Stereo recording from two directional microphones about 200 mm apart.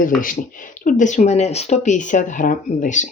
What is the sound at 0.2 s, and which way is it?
Speech, 45° left (ahead or behind).